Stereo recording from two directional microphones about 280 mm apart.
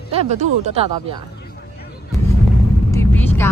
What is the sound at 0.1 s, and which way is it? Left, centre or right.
Speech, right.